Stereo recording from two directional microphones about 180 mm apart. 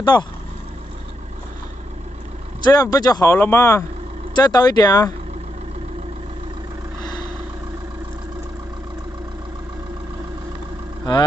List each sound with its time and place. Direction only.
0.0 s speech: 25° left (ahead or behind)
2.6 s speech: 20° left (ahead or behind)
7.0 s vehicle: 25° left (ahead or behind)